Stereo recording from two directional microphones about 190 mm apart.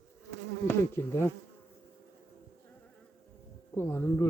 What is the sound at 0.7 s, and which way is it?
Speech, 10° left (ahead or behind).